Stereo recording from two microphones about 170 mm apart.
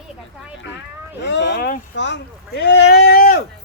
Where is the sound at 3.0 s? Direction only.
60° left (ahead or behind).